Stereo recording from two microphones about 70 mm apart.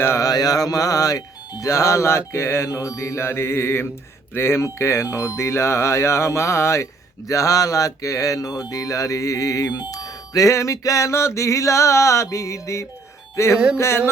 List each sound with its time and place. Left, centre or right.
0.2 s music: left
9.6 s music: left
13.3 s speech: left
13.7 s music: left